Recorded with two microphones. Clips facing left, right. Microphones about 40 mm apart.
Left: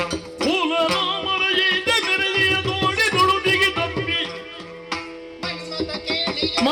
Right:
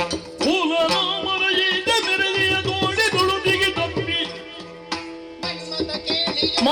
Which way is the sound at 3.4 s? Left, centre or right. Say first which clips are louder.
Left 1 dB; centre.